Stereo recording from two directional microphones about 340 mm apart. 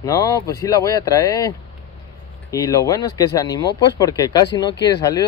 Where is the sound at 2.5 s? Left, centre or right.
Centre.